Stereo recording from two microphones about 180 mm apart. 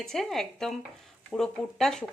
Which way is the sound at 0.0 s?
Centre (ahead or behind).